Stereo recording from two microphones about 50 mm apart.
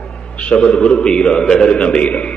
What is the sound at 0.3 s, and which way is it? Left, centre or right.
A man's voice, left.